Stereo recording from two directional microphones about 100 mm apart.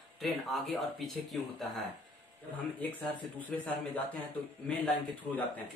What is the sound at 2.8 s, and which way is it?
Speech, 15° left (ahead or behind).